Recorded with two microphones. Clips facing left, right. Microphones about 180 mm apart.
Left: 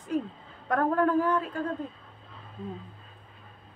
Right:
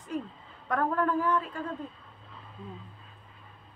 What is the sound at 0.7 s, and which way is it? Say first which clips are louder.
Speech: left 3 dB; 50° left (ahead or behind).